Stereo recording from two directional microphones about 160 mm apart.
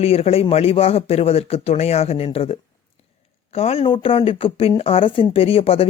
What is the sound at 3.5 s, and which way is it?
Speech, 35° left (ahead or behind).